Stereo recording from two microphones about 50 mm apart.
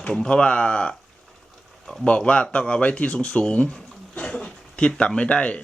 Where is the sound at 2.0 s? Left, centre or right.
Left.